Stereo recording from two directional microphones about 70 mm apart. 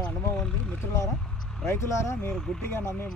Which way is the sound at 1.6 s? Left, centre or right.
Left.